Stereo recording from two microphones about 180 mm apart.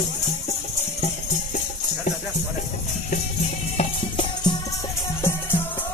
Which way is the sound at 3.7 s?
25° left (ahead or behind).